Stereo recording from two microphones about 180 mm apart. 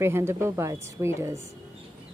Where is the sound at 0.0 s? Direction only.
15° right (ahead or behind).